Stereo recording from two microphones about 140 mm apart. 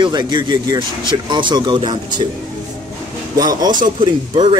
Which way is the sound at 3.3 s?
25° right (ahead or behind).